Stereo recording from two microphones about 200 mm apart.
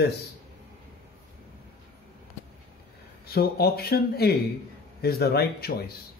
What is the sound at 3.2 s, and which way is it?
Speech, 50° left (ahead or behind).